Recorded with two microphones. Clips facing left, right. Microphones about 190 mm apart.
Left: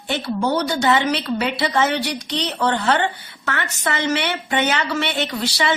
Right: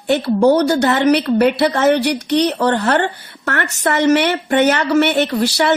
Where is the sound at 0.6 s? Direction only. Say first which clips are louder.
Right 6 dB; 65° right (ahead or behind).